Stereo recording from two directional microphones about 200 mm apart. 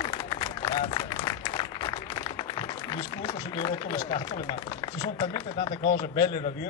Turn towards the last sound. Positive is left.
turn(degrees=25)  # may be behind; listen again after turning